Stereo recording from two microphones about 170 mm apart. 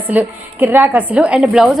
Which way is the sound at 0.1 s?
10° right (ahead or behind).